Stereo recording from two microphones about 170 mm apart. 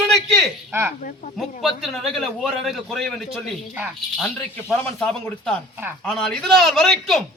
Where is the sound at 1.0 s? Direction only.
50° left (ahead or behind).